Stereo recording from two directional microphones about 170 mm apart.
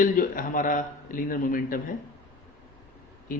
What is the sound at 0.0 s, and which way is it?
A man's voice, 55° left (ahead or behind).